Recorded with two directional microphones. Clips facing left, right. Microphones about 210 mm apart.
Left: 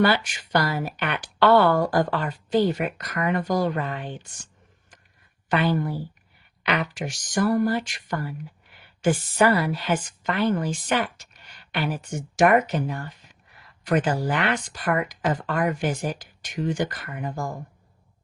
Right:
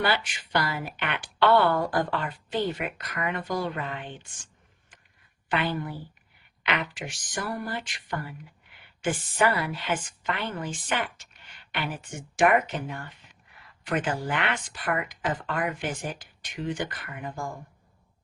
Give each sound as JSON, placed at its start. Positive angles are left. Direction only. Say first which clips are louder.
{"t": 0.0, "sound": "speech", "louder": "left 6 dB", "side_deg": 45}
{"t": 5.5, "sound": "speech", "louder": "left 6 dB", "side_deg": 40}